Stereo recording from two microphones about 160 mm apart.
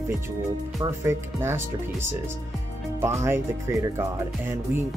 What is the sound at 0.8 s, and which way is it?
Speech, 15° right (ahead or behind).